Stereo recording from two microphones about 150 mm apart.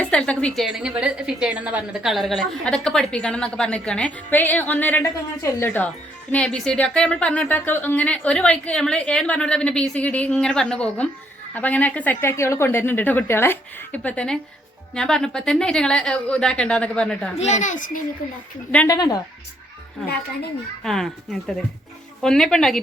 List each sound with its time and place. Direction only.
0.0 s a woman's voice: 10° left (ahead or behind)
17.3 s a child's voice: 50° left (ahead or behind)
18.9 s speech: 25° left (ahead or behind)
20.8 s a woman's voice: 5° left (ahead or behind)